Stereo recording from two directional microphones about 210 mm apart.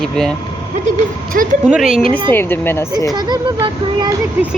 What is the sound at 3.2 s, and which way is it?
Speech, 20° right (ahead or behind).